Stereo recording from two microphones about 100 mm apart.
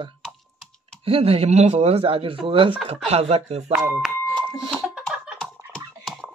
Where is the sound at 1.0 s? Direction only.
70° right (ahead or behind).